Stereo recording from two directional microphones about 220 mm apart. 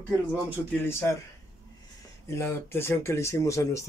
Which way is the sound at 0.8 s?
10° left (ahead or behind).